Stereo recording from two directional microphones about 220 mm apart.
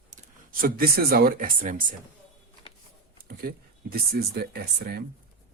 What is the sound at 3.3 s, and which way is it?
Speech, 45° right (ahead or behind).